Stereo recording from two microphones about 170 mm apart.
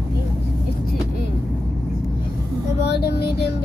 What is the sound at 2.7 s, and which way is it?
Vehicle, 75° left (ahead or behind).